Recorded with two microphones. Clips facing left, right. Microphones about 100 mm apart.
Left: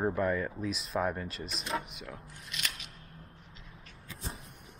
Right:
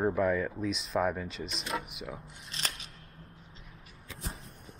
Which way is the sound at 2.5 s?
35° right (ahead or behind).